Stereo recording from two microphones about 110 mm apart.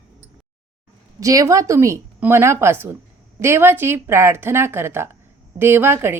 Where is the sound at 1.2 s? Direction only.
30° right (ahead or behind).